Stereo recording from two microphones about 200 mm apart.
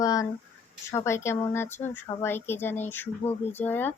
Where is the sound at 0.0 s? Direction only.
15° left (ahead or behind).